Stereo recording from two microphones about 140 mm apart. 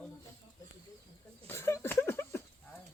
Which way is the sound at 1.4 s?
20° left (ahead or behind).